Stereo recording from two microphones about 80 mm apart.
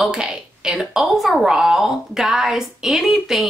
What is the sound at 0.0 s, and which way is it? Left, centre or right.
A woman's voice, centre.